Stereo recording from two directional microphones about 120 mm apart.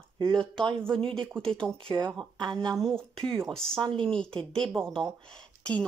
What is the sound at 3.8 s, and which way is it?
Speech, 45° right (ahead or behind).